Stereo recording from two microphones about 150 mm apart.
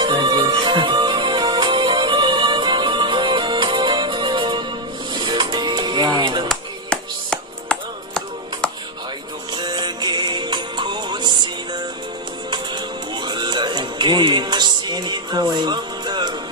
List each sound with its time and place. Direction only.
0.0 s music: 30° right (ahead or behind)
6.5 s music: 5° left (ahead or behind)
9.6 s music: 30° right (ahead or behind)